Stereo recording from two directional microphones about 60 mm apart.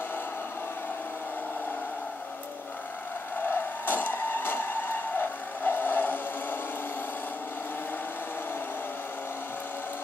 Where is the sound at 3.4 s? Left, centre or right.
Left.